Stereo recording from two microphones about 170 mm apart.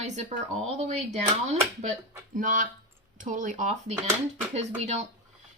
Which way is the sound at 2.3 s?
50° right (ahead or behind).